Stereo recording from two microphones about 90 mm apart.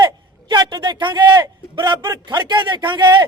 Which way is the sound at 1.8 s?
45° right (ahead or behind).